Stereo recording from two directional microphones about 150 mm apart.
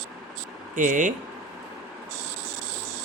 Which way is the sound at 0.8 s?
60° right (ahead or behind).